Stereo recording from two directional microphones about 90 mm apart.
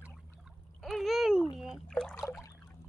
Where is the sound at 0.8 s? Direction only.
Centre (ahead or behind).